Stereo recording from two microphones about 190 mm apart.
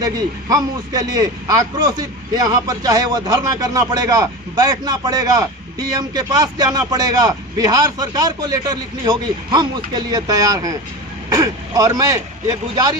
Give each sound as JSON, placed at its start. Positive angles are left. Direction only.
{"t": 0.0, "sound": "a man's voice", "side_deg": -20}